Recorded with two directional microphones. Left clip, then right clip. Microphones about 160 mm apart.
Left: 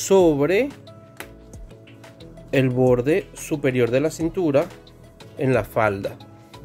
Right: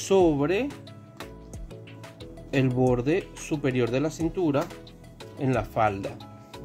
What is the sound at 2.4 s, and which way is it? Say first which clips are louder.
Speech: left 6 dB; 35° left (ahead or behind).